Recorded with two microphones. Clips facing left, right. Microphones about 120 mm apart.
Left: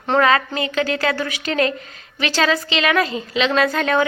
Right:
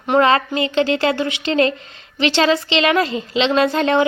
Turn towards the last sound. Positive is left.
turn(degrees=-25)  # may be behind; listen again after turning